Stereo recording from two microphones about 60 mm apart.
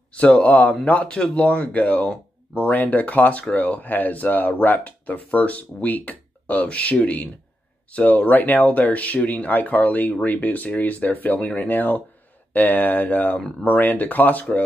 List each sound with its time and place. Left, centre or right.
0.1 s speech: left